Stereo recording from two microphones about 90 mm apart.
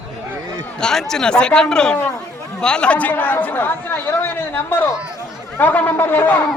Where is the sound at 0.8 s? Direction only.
5° left (ahead or behind).